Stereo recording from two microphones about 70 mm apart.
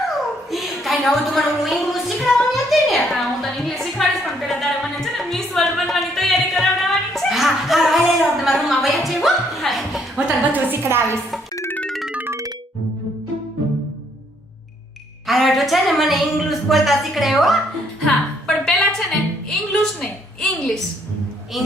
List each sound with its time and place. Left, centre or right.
0.5 s music: centre
10.2 s a woman's voice: centre
10.7 s a woman's voice: right
15.3 s a woman's voice: centre
18.0 s music: centre
19.5 s a woman's voice: centre